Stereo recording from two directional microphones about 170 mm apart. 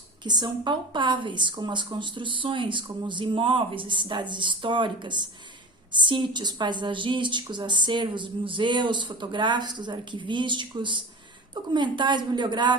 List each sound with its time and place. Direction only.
0.3 s a woman's voice: 25° right (ahead or behind)